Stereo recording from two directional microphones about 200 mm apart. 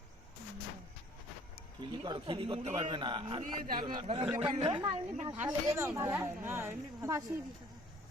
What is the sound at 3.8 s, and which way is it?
A man's voice, 25° right (ahead or behind).